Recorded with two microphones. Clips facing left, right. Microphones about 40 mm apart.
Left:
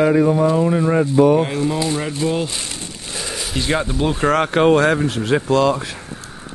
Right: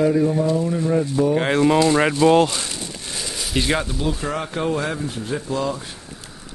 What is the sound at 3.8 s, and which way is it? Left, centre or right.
Speech, left.